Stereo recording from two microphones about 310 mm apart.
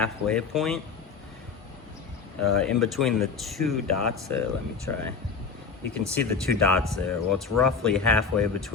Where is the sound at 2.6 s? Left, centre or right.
Centre.